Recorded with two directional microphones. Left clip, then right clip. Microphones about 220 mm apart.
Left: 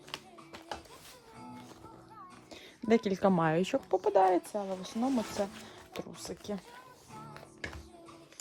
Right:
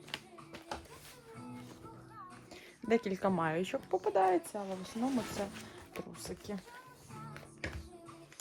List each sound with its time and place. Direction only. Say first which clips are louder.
0.1 s music: even; 10° left (ahead or behind)
2.5 s speech: left 4 dB; 45° left (ahead or behind)
6.0 s a sound: left 3 dB; 40° left (ahead or behind)